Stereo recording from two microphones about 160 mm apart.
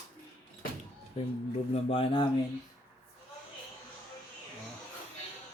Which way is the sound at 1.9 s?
30° left (ahead or behind).